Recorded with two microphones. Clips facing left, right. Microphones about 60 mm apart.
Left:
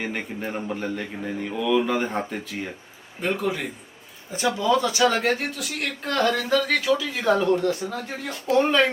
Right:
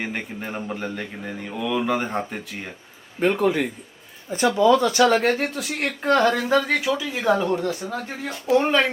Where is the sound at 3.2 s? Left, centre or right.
Right.